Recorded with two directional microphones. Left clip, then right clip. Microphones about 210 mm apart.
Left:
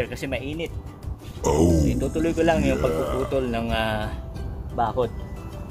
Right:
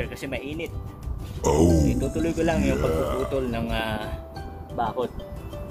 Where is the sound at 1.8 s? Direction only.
15° left (ahead or behind).